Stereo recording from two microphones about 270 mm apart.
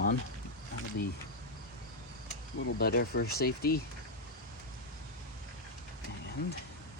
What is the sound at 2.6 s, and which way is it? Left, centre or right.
Speech, left.